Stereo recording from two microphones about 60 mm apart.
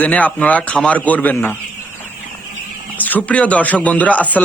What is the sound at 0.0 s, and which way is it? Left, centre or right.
Speech, left.